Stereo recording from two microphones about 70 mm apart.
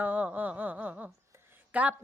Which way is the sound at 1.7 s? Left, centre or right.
Right.